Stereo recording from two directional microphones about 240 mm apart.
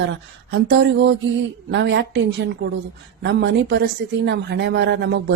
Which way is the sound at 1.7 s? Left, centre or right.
Right.